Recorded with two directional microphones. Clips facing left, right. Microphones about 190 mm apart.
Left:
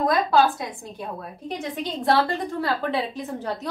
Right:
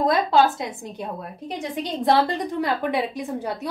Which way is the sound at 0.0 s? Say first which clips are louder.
Right 1 dB; 25° right (ahead or behind).